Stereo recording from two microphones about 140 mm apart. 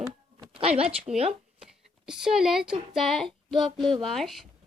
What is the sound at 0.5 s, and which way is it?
Speech, 45° right (ahead or behind).